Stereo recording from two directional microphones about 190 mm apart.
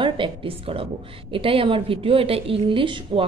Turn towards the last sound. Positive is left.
turn(degrees=-25)  # may be behind; listen again after turning